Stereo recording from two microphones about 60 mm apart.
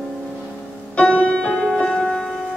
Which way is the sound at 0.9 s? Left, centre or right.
Centre.